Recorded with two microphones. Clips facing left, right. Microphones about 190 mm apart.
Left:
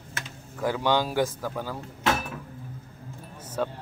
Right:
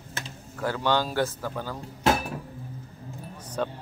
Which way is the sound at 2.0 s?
35° right (ahead or behind).